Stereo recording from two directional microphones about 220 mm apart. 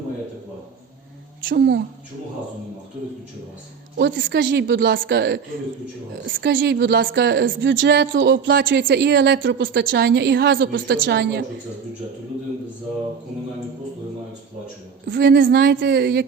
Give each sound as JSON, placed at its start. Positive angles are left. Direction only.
{"t": 1.5, "sound": "a woman's voice", "side_deg": -50}
{"t": 3.9, "sound": "a woman's voice", "side_deg": -50}
{"t": 15.0, "sound": "a woman's voice", "side_deg": -50}